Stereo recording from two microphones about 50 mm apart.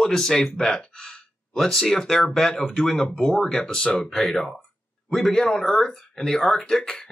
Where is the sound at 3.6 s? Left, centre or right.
Centre.